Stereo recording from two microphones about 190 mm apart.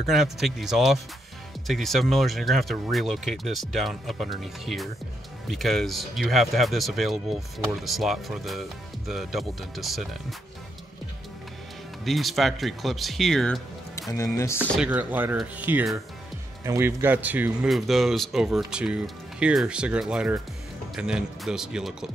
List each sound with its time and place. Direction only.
0.0 s speech: centre (ahead or behind)
12.0 s speech: centre (ahead or behind)
14.1 s speech: 15° left (ahead or behind)
14.8 s speech: 10° right (ahead or behind)